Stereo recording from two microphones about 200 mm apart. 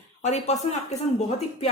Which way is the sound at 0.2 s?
35° left (ahead or behind).